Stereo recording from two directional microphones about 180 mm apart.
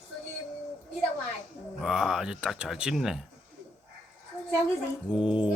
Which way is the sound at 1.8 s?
Centre (ahead or behind).